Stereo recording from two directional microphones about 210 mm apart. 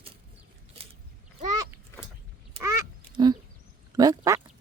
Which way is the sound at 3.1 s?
20° right (ahead or behind).